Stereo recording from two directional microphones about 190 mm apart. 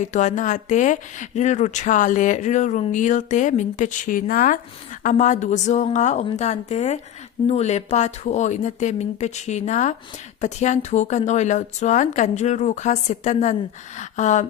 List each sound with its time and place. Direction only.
0.0 s speech: 40° left (ahead or behind)